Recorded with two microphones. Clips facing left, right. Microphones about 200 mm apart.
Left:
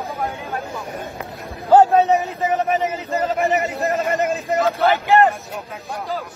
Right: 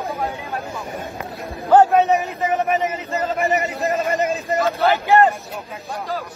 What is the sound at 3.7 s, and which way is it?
A man's voice, centre (ahead or behind).